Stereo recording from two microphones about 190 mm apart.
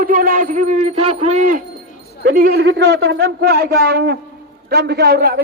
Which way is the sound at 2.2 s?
55° right (ahead or behind).